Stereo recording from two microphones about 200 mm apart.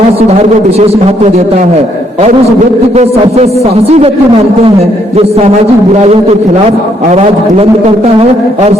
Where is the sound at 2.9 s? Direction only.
35° right (ahead or behind).